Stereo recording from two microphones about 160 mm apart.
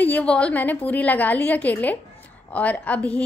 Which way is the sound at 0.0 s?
10° left (ahead or behind).